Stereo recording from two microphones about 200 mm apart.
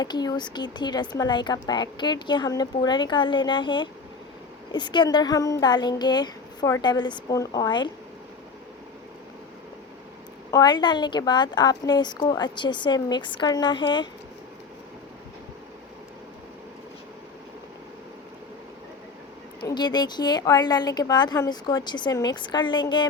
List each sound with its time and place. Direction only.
0.0 s a woman's voice: 20° left (ahead or behind)
10.5 s a woman's voice: 20° left (ahead or behind)
19.6 s a woman's voice: 20° left (ahead or behind)